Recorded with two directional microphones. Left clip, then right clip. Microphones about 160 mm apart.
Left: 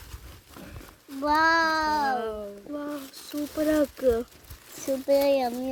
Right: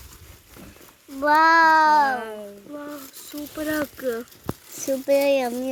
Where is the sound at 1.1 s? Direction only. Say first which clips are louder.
Right 6 dB; 25° right (ahead or behind).